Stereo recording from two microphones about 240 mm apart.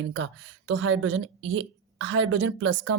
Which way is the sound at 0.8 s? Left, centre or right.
Right.